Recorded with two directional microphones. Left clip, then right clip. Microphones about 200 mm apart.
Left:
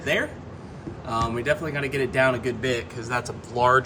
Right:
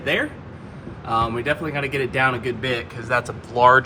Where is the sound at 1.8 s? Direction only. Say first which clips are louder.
Right 3 dB; centre (ahead or behind).